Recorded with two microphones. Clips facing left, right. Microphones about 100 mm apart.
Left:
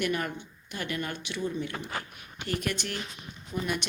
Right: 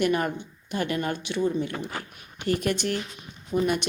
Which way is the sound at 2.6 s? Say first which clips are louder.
Right 6 dB; 45° right (ahead or behind).